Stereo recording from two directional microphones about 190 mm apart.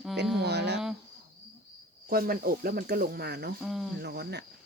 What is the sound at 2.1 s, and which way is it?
Speech, 50° right (ahead or behind).